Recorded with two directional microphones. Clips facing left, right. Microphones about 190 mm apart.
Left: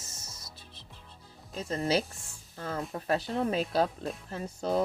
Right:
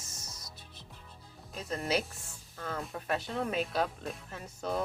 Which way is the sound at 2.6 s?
35° left (ahead or behind).